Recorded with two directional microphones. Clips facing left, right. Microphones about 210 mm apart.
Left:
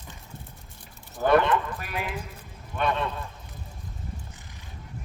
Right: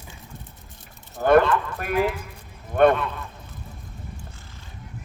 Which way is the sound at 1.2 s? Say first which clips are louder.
Right 4 dB; 50° right (ahead or behind).